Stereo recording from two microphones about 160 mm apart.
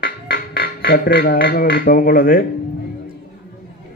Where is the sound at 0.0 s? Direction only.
70° left (ahead or behind).